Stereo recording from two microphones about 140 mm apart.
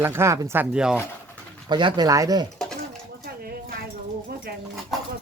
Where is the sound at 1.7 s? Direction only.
30° right (ahead or behind).